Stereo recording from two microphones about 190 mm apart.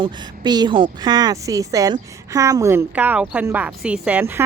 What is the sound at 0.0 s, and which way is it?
A woman's voice, 20° right (ahead or behind).